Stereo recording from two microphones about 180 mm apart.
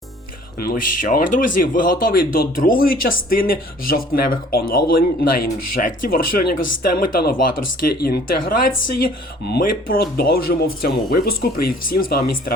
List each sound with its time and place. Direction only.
0.6 s speech: 55° left (ahead or behind)